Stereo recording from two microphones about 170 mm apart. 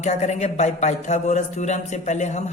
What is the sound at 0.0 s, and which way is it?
A man's voice, 45° left (ahead or behind).